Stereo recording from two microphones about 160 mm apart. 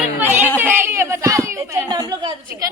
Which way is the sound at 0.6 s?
15° right (ahead or behind).